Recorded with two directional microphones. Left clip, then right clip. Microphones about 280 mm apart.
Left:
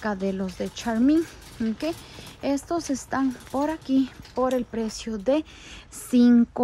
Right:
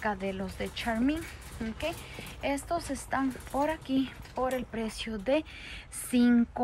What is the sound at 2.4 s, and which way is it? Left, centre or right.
Speech, centre.